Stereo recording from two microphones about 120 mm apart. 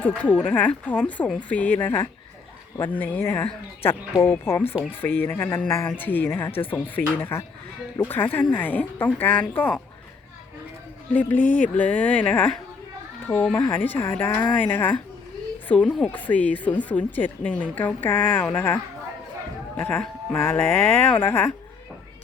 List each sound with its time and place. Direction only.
0.2 s speech: 10° left (ahead or behind)
11.1 s speech: 15° left (ahead or behind)
11.4 s music: 90° left
11.8 s speech: 10° left (ahead or behind)